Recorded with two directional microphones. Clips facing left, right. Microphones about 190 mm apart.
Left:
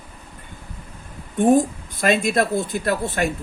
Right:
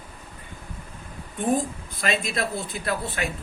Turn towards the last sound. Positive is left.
turn(degrees=45)  # may be behind; listen again after turning